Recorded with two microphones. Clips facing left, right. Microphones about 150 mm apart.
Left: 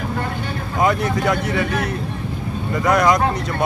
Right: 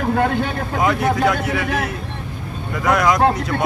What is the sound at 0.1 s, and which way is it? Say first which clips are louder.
Speech: right 7 dB; 70° right (ahead or behind).